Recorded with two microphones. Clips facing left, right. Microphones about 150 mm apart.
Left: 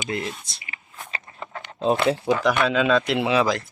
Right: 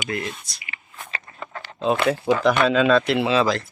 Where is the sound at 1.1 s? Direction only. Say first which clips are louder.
Right 1 dB; 20° left (ahead or behind).